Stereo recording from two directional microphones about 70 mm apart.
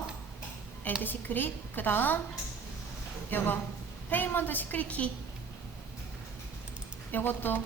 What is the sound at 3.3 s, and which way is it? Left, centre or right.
A woman's voice, left.